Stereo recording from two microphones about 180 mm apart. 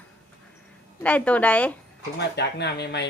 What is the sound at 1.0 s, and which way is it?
Speech, 5° left (ahead or behind).